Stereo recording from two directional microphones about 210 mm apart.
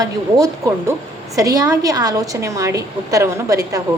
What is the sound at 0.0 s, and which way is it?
A woman's voice, 15° right (ahead or behind).